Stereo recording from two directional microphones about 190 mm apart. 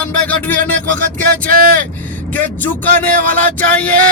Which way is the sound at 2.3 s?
10° left (ahead or behind).